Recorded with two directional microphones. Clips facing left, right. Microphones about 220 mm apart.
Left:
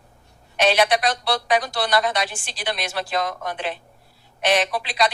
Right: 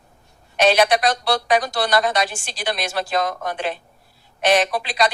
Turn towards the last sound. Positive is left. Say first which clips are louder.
# right 2 dB
turn(degrees=-45)  # may be behind; listen again after turning